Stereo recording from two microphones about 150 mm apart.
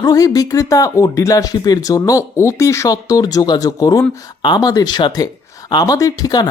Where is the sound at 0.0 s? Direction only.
25° left (ahead or behind).